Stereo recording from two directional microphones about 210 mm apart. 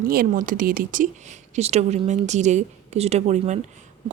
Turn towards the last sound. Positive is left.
turn(degrees=-30)  # may be behind; listen again after turning